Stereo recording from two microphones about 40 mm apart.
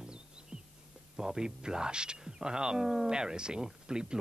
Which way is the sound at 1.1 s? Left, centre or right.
Centre.